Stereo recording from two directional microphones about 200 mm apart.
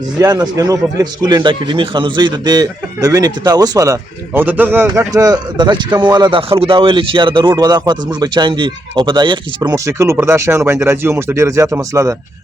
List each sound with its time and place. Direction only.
0.2 s speech: 20° right (ahead or behind)